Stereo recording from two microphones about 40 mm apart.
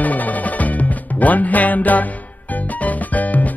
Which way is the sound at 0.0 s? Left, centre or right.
Left.